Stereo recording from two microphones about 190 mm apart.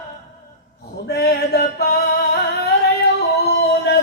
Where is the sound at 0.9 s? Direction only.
55° left (ahead or behind).